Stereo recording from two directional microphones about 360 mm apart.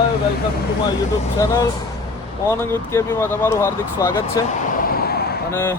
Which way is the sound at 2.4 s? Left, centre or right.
Centre.